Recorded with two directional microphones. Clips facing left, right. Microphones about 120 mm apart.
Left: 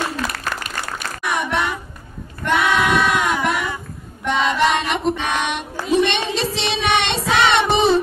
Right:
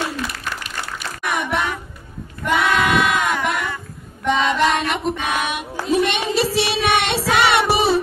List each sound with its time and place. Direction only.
0.2 s applause: 45° left (ahead or behind)
1.2 s a sound: centre (ahead or behind)
4.2 s child singing: centre (ahead or behind)